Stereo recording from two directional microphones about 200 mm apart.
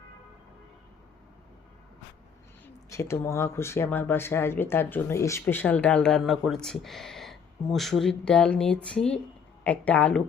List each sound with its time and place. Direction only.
2.9 s speech: 15° left (ahead or behind)